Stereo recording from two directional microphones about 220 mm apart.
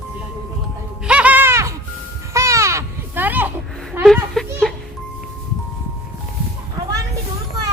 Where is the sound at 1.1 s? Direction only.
5° right (ahead or behind).